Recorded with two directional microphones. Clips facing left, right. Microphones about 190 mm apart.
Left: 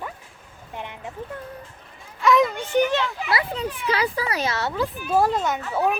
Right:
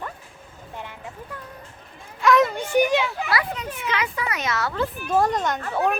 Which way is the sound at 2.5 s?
10° right (ahead or behind).